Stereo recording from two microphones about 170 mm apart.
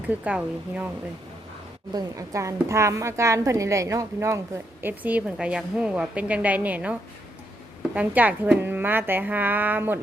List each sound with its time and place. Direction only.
0.1 s a woman's voice: 10° right (ahead or behind)
1.9 s a woman's voice: 20° right (ahead or behind)